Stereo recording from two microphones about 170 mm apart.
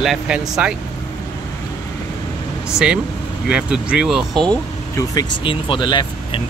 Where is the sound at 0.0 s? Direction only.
Centre (ahead or behind).